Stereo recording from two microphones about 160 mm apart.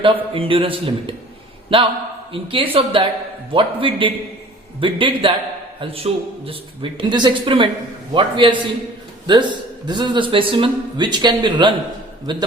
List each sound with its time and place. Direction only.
0.0 s speech: 35° right (ahead or behind)
2.3 s a man's voice: 35° right (ahead or behind)